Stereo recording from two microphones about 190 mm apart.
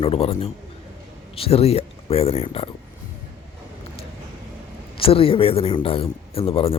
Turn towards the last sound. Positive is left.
turn(degrees=30)  # may be behind; listen again after turning